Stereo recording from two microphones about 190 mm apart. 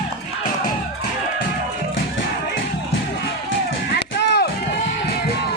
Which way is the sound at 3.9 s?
65° left (ahead or behind).